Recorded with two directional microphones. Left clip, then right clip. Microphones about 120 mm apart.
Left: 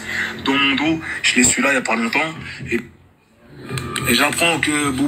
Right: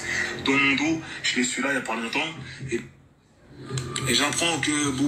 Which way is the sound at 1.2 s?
60° left (ahead or behind).